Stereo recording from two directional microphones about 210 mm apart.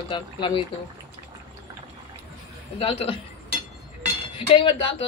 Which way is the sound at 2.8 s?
25° left (ahead or behind).